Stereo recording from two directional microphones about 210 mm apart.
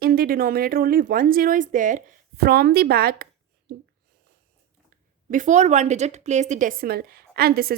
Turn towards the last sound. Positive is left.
turn(degrees=-45)  # may be behind; listen again after turning